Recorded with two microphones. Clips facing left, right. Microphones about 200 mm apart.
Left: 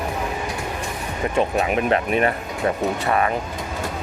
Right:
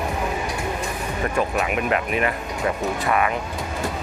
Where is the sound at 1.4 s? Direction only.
30° left (ahead or behind).